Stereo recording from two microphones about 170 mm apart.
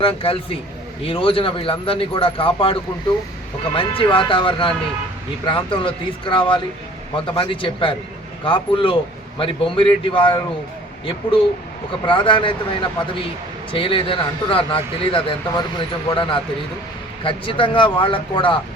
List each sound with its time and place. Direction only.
0.0 s speech: 35° left (ahead or behind)
3.8 s speech: 30° left (ahead or behind)
12.0 s speech: 30° left (ahead or behind)